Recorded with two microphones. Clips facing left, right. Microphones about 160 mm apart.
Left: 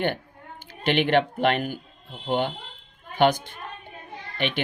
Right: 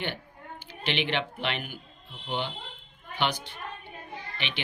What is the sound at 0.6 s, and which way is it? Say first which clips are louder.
Speech: left 8 dB; 50° left (ahead or behind).